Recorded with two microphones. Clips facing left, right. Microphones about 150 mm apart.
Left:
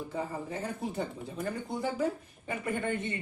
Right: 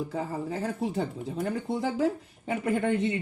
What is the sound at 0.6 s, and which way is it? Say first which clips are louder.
Speech: right 5 dB; 80° right.